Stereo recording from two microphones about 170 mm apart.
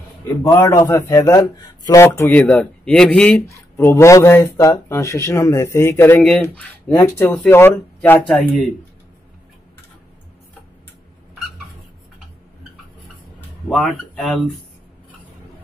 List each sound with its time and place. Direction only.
0.2 s speech: 20° left (ahead or behind)
2.4 s speech: 5° left (ahead or behind)
13.7 s speech: centre (ahead or behind)